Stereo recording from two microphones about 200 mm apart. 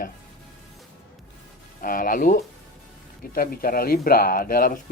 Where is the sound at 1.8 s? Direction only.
45° left (ahead or behind).